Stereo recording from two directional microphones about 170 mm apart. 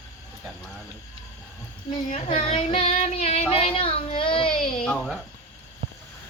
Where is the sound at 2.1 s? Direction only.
40° left (ahead or behind).